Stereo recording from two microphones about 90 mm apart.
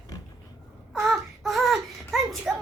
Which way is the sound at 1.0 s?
Centre (ahead or behind).